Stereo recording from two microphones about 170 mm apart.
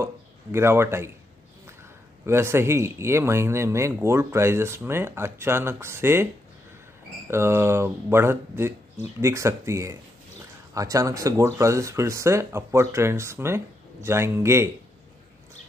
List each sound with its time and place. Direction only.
0.0 s a man's voice: 15° right (ahead or behind)
2.2 s speech: 15° right (ahead or behind)
7.2 s speech: 15° right (ahead or behind)